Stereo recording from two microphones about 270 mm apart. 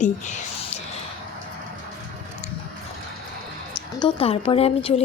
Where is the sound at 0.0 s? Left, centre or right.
Left.